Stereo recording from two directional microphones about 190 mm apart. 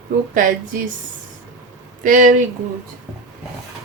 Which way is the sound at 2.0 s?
45° right (ahead or behind).